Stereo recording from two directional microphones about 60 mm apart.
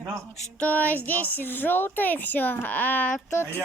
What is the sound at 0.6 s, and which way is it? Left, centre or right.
Speech, left.